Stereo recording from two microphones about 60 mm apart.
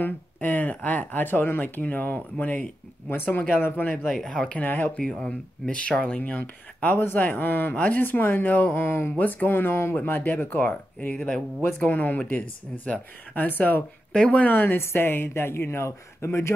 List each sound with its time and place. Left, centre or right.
0.0 s speech: left
4.0 s speech: centre
4.3 s speech: left
11.6 s speech: left
14.1 s speech: left
14.6 s speech: left